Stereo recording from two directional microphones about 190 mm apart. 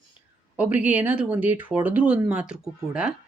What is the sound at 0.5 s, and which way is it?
Speech, 5° right (ahead or behind).